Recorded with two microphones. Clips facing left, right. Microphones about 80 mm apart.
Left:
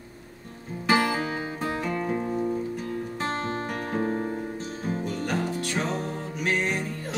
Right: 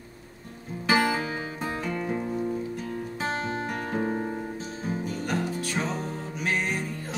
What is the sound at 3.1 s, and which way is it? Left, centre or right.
Music, centre.